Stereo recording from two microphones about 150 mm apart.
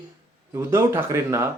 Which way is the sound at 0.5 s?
15° right (ahead or behind).